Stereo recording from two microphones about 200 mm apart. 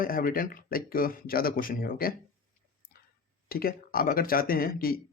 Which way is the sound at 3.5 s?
45° left (ahead or behind).